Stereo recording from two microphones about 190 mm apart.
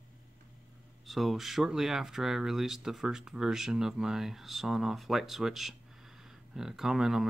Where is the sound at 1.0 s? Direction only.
Centre (ahead or behind).